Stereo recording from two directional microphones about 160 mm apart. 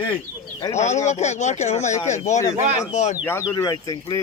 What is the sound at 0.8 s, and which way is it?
Speech, 45° left (ahead or behind).